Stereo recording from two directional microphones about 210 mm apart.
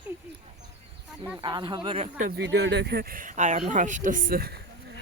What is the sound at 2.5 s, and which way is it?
Speech, 55° right (ahead or behind).